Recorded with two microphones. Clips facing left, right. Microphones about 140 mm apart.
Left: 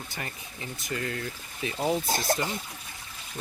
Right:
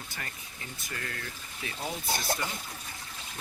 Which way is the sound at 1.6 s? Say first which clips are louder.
Left 8 dB; 25° left (ahead or behind).